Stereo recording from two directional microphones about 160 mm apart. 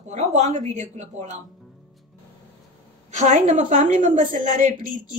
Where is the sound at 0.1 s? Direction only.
45° right (ahead or behind).